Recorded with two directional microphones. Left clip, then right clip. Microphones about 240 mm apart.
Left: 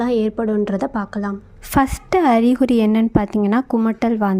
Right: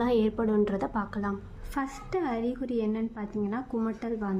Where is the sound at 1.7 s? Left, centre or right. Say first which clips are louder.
Left 15 dB; left.